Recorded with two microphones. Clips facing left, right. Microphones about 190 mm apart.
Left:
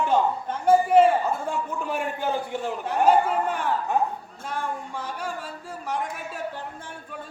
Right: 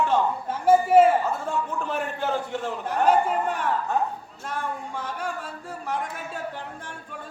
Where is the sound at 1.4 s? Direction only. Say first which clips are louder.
Right 1 dB; 15° left (ahead or behind).